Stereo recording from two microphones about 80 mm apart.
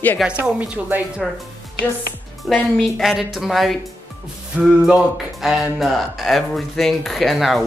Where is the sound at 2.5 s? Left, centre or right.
Centre.